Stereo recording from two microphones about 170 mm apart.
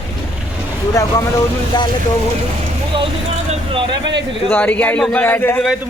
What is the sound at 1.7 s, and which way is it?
Speech, 25° left (ahead or behind).